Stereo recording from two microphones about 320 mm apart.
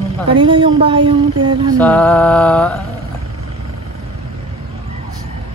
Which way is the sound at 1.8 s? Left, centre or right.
Centre.